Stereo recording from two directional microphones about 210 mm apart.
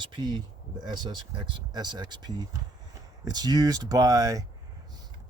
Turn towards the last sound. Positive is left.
turn(degrees=-15)  # may be behind; listen again after turning